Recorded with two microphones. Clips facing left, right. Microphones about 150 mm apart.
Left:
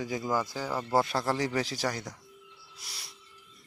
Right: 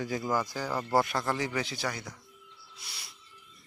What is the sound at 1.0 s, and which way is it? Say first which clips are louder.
Speech: left 1 dB; 30° left (ahead or behind).